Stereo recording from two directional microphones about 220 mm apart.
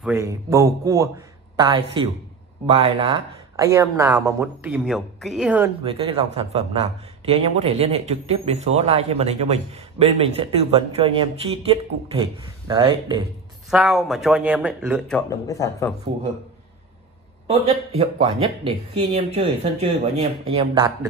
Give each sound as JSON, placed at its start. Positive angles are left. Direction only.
{"t": 0.0, "sound": "a man's voice", "side_deg": -15}
{"t": 5.9, "sound": "a man's voice", "side_deg": -25}
{"t": 13.7, "sound": "speech", "side_deg": 0}
{"t": 15.2, "sound": "speech", "side_deg": 15}
{"t": 17.5, "sound": "a man's voice", "side_deg": -25}